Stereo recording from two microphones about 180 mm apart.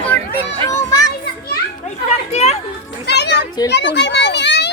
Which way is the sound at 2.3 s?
35° left (ahead or behind).